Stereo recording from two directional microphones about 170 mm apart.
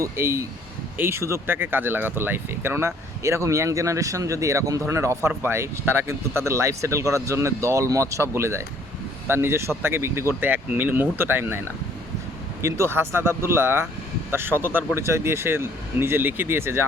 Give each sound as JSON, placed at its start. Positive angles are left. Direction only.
{"t": 0.0, "sound": "speech", "side_deg": -15}
{"t": 12.6, "sound": "speech", "side_deg": -15}